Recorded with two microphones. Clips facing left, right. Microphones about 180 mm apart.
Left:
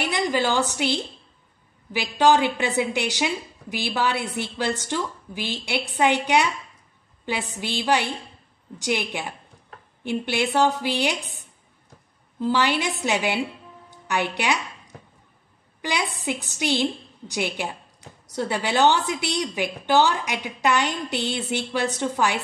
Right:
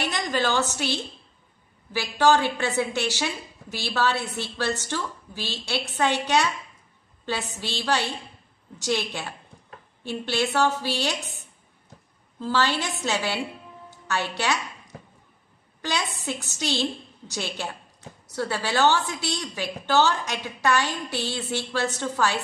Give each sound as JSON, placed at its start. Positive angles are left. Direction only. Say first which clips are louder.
{"t": 0.1, "sound": "a woman's voice", "louder": "left 4 dB", "side_deg": 10}
{"t": 12.4, "sound": "a woman's voice", "louder": "left 3 dB", "side_deg": 15}
{"t": 15.8, "sound": "a woman's voice", "louder": "left 2 dB", "side_deg": 15}